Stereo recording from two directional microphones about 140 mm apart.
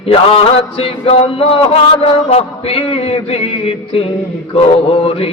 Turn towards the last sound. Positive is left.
turn(degrees=40)  # may be behind; listen again after turning